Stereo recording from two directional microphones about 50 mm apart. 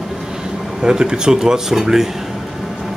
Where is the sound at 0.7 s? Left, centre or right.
Centre.